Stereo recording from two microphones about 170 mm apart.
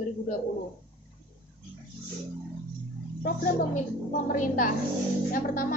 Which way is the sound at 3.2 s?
55° left (ahead or behind).